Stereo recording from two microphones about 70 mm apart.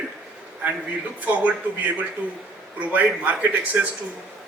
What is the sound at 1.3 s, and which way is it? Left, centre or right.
A man's voice, right.